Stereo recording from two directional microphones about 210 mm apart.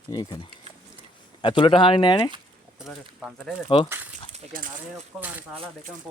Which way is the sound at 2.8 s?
5° right (ahead or behind).